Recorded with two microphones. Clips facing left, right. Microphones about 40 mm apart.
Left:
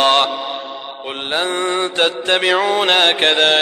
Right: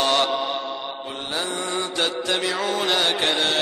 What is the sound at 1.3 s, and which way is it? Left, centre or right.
Mantra, left.